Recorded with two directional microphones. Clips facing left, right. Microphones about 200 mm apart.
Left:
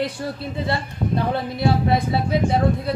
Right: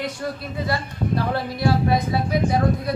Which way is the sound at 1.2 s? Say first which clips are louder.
Left 2 dB; 20° left (ahead or behind).